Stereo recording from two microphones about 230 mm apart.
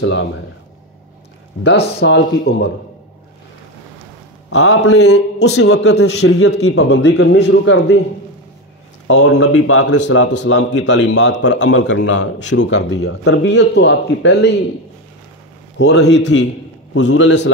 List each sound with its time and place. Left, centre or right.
0.0 s a man's voice: left
1.6 s a man's voice: left
4.5 s a man's voice: left
9.0 s speech: left
9.8 s a man's voice: left
15.8 s a man's voice: left